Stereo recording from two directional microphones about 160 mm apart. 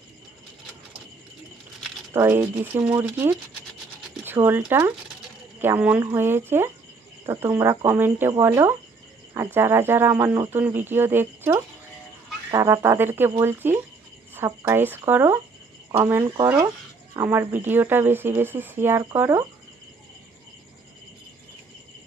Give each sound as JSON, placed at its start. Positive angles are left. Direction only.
{"t": 2.1, "sound": "speech", "side_deg": -15}